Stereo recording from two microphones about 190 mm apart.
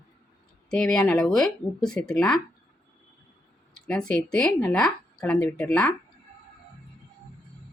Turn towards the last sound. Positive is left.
turn(degrees=5)  # may be behind; listen again after turning